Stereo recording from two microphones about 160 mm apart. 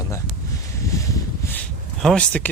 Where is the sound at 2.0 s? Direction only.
5° left (ahead or behind).